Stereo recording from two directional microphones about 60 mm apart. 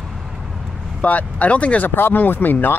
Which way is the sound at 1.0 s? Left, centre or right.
Left.